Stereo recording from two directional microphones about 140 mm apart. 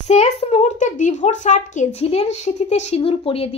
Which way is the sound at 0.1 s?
50° left (ahead or behind).